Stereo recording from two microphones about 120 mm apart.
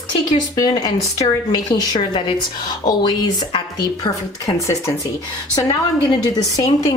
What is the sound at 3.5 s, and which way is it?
Speech, 35° left (ahead or behind).